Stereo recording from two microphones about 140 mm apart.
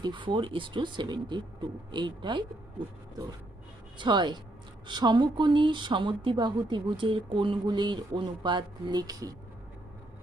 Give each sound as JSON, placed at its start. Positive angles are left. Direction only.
{"t": 0.0, "sound": "speech", "side_deg": -35}
{"t": 3.9, "sound": "speech", "side_deg": -30}